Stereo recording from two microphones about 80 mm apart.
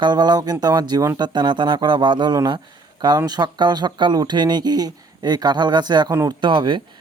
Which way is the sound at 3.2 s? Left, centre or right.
Right.